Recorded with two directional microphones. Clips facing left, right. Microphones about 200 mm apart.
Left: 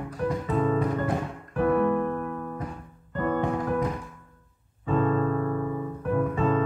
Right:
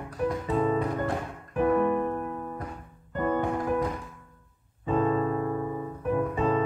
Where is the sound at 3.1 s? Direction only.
15° right (ahead or behind).